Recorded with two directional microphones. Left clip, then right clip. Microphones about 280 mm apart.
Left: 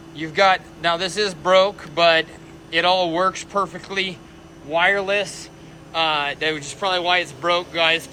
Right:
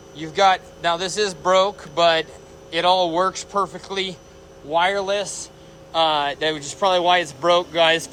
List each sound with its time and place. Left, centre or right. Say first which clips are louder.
0.2 s a man's voice: even; centre
3.5 s speech: even; centre
3.8 s a man's voice: left 2 dB; centre